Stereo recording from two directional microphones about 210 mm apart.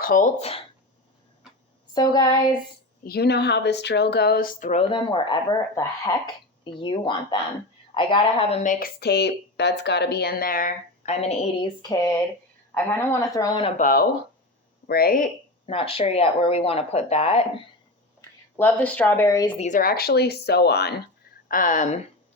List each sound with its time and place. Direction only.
0.0 s speech: 40° left (ahead or behind)
1.9 s speech: 20° left (ahead or behind)
3.0 s speech: 50° left (ahead or behind); by 6.3 s 15° left (ahead or behind)
6.7 s a woman's voice: 25° left (ahead or behind)
13.8 s speech: 45° left (ahead or behind)
15.7 s speech: 25° left (ahead or behind)
18.2 s speech: 10° left (ahead or behind)
19.5 s speech: 35° left (ahead or behind); by 20.9 s 50° left (ahead or behind)
21.4 s speech: 40° left (ahead or behind)